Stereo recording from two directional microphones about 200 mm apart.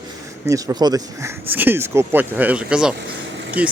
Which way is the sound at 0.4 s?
15° right (ahead or behind).